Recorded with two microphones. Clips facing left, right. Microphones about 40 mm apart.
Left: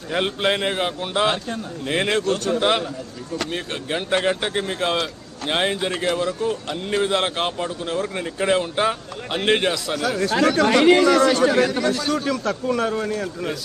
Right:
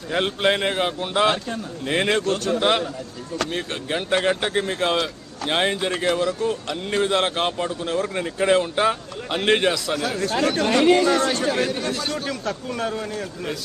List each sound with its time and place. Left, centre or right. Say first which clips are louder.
0.1 s a man's voice: right 1 dB; centre
10.1 s speech: left 5 dB; left